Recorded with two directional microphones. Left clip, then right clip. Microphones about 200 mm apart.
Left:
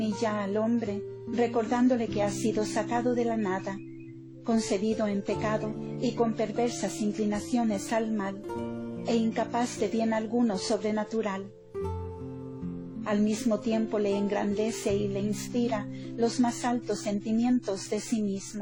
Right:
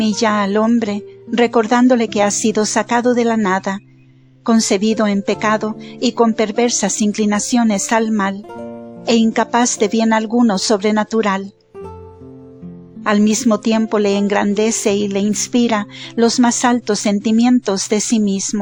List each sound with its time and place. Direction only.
0.0 s a woman's voice: 40° right (ahead or behind)
13.1 s a woman's voice: 45° right (ahead or behind)